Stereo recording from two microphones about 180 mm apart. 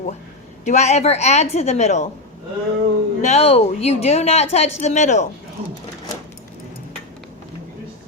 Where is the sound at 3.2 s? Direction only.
35° left (ahead or behind).